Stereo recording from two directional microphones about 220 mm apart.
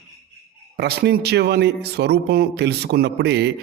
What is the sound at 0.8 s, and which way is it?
Speech, 50° right (ahead or behind).